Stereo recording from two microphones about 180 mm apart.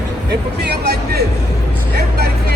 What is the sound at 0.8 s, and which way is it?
Speech, 65° right (ahead or behind).